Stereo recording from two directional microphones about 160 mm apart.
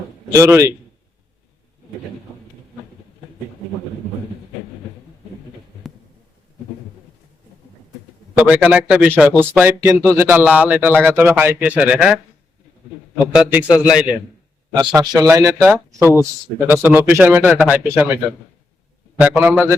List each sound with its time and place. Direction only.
0.3 s a man's voice: 20° right (ahead or behind)
8.4 s speech: 10° right (ahead or behind)
13.1 s speech: 10° right (ahead or behind)
14.8 s speech: 25° right (ahead or behind); by 18.2 s 10° right (ahead or behind)
19.2 s speech: 10° right (ahead or behind)